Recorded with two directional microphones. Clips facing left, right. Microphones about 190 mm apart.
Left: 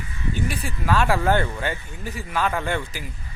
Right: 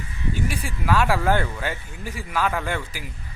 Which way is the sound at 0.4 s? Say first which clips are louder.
Left 1 dB; 10° right (ahead or behind).